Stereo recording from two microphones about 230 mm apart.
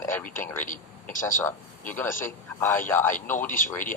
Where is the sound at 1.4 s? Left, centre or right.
Centre.